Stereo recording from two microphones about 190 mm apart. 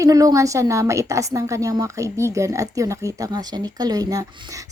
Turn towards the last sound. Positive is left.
turn(degrees=-20)  # may be behind; listen again after turning